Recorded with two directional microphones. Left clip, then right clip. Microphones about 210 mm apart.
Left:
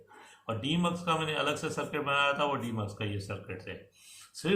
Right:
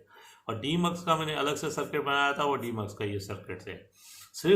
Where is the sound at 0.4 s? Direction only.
35° right (ahead or behind).